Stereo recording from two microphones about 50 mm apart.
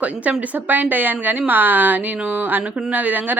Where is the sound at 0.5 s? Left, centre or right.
Right.